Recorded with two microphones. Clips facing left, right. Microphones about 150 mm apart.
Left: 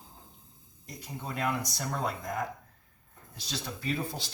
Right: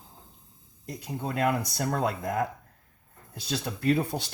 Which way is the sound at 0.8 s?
60° right (ahead or behind).